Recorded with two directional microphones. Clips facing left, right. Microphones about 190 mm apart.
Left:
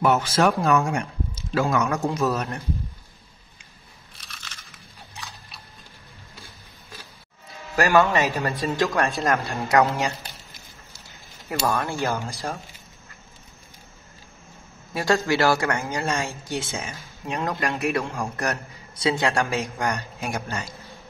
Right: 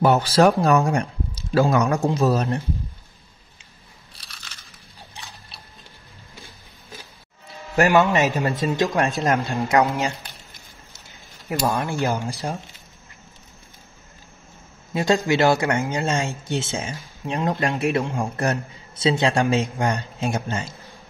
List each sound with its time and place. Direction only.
0.0 s speech: 35° right (ahead or behind)
7.7 s a man's voice: 20° right (ahead or behind)
11.4 s speech: 20° right (ahead or behind)
15.0 s a man's voice: 20° right (ahead or behind)
16.6 s a man's voice: 30° right (ahead or behind)
18.0 s a man's voice: 15° right (ahead or behind)